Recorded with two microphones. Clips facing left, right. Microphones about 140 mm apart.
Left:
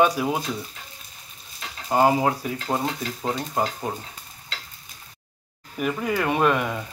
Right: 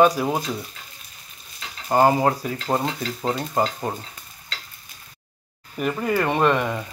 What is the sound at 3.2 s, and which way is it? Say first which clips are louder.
Speech: right 4 dB; 15° right (ahead or behind).